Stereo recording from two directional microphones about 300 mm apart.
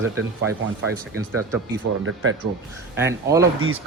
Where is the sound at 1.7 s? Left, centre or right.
Right.